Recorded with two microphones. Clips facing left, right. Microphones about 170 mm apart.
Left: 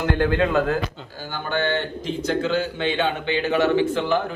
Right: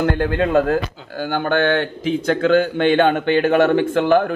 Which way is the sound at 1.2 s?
60° right (ahead or behind).